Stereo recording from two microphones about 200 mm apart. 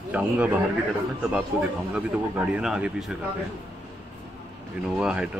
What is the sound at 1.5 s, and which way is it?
Speech, 5° right (ahead or behind).